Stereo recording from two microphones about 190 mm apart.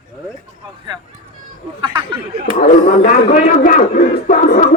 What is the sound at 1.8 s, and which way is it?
Speech, 25° right (ahead or behind).